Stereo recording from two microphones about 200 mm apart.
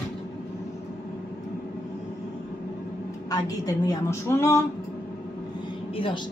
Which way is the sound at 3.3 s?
20° left (ahead or behind).